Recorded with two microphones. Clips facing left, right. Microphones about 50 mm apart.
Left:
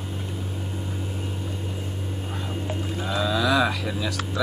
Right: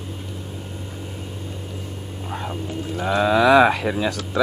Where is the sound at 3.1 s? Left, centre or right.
Right.